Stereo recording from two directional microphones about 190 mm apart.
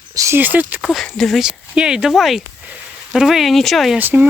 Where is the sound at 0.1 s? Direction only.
15° right (ahead or behind).